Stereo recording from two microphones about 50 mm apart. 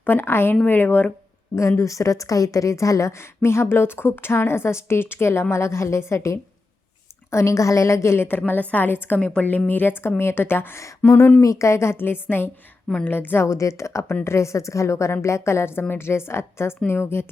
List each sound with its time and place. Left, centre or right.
0.0 s a woman's voice: left
0.7 s speech: left
1.8 s a woman's voice: left
9.1 s a woman's voice: left
9.6 s a woman's voice: left
11.0 s speech: left
11.3 s a woman's voice: left
13.4 s a woman's voice: left
15.1 s a woman's voice: left
15.4 s a woman's voice: left